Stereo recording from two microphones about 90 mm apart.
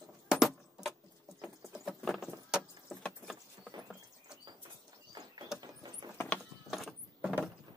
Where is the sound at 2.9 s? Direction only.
10° left (ahead or behind).